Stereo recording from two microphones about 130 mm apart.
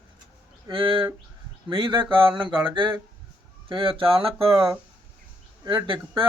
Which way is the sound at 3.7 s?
40° right (ahead or behind).